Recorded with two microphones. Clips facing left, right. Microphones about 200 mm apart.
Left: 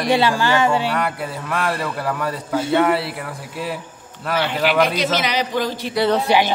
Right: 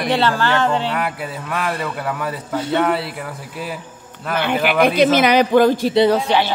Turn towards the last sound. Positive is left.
turn(degrees=15)  # may be behind; listen again after turning